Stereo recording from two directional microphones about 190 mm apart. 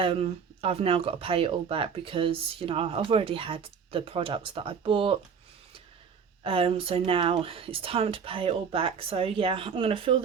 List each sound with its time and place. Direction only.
0.0 s speech: 30° right (ahead or behind)
6.4 s speech: 30° right (ahead or behind)